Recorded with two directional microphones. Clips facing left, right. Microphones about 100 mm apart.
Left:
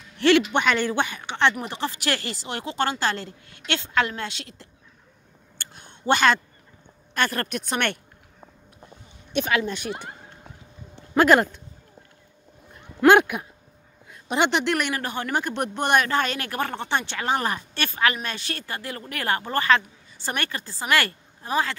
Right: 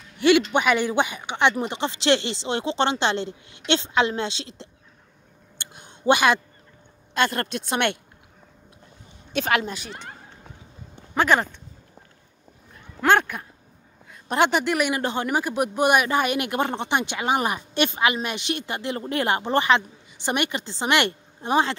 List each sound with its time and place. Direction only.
0.5 s a woman's voice: 10° right (ahead or behind)
5.6 s a sound: 15° right (ahead or behind)
7.2 s speech: 25° right (ahead or behind)
9.8 s speech: 10° left (ahead or behind)
11.1 s speech: 5° left (ahead or behind)
13.0 s a woman's voice: 10° left (ahead or behind)
15.0 s speech: 20° right (ahead or behind)
15.3 s speech: 5° right (ahead or behind); by 21.7 s 25° right (ahead or behind)